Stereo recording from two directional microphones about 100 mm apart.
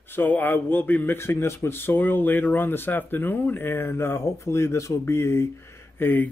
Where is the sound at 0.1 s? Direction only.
20° left (ahead or behind).